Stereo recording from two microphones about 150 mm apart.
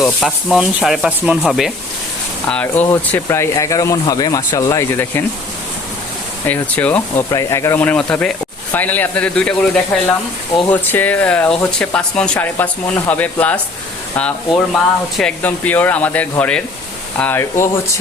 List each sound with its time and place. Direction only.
0.0 s rub: centre (ahead or behind)
2.5 s speech: 10° left (ahead or behind)
6.5 s speech: 10° left (ahead or behind)
7.3 s speech: 20° left (ahead or behind); by 9.6 s 5° left (ahead or behind)
9.9 s rub: 5° left (ahead or behind)
10.7 s speech: 10° left (ahead or behind)
15.1 s speech: 10° left (ahead or behind)